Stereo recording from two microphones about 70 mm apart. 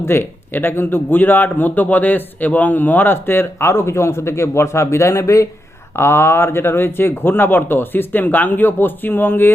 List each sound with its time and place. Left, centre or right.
0.0 s speech: left